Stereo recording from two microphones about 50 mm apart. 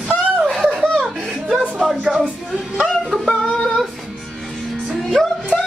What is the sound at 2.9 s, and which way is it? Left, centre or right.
Yodeling, centre.